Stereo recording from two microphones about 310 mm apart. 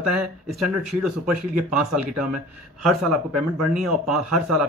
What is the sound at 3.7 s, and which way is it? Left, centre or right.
Speech, centre.